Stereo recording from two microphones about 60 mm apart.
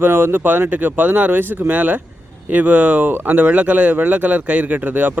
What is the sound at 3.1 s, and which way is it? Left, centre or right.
Speech, right.